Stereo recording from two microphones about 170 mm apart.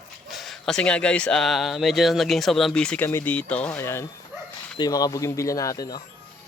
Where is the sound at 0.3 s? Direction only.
Centre (ahead or behind).